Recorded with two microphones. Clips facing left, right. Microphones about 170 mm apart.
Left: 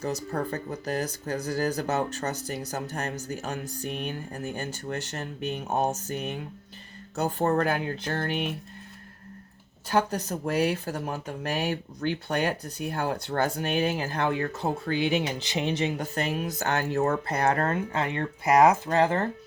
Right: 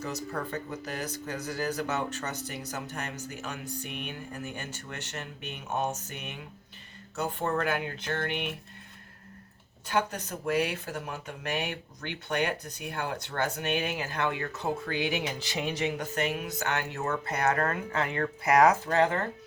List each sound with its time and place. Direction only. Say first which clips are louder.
0.0 s speech: left 5 dB; 35° left (ahead or behind)
9.9 s speech: left 4 dB; 40° left (ahead or behind)